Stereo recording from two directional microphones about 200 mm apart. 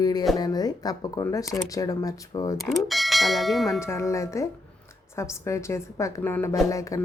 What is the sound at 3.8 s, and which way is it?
A woman's voice, 15° left (ahead or behind).